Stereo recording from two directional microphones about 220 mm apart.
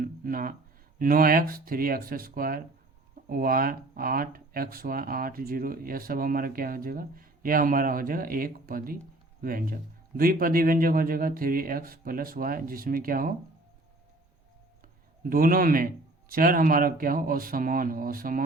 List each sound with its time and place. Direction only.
0.0 s a sound: 40° right (ahead or behind)
0.9 s speech: 40° right (ahead or behind)
15.2 s speech: 40° right (ahead or behind)